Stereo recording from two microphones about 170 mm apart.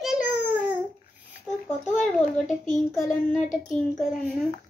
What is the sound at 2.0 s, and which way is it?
Speech, 5° left (ahead or behind).